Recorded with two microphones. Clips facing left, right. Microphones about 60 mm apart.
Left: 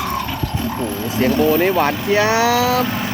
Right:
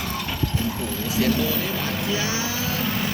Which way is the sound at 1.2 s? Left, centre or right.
Left.